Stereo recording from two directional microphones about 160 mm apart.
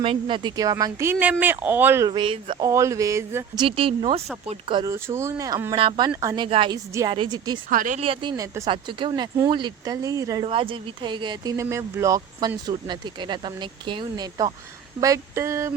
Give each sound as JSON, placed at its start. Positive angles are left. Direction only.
{"t": 0.0, "sound": "speech", "side_deg": -35}
{"t": 2.0, "sound": "speech", "side_deg": -30}
{"t": 4.9, "sound": "speech", "side_deg": -15}
{"t": 5.7, "sound": "speech", "side_deg": -35}
{"t": 7.7, "sound": "speech", "side_deg": -60}
{"t": 7.9, "sound": "speech", "side_deg": -35}
{"t": 11.5, "sound": "speech", "side_deg": -20}